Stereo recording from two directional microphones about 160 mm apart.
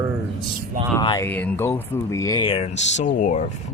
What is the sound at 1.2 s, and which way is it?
Speech, 10° left (ahead or behind).